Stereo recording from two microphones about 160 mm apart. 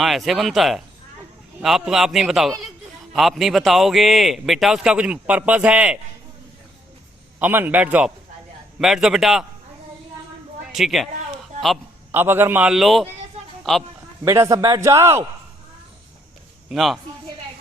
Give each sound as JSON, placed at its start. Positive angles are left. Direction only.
{"t": 0.0, "sound": "a man's voice", "side_deg": 0}
{"t": 7.3, "sound": "a man's voice", "side_deg": -10}
{"t": 10.7, "sound": "speech", "side_deg": 0}
{"t": 12.1, "sound": "a man's voice", "side_deg": -15}
{"t": 14.3, "sound": "a man's voice", "side_deg": -20}
{"t": 16.6, "sound": "a man's voice", "side_deg": 0}